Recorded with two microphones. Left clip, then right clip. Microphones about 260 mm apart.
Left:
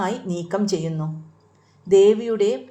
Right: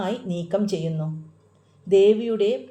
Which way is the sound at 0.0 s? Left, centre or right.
Left.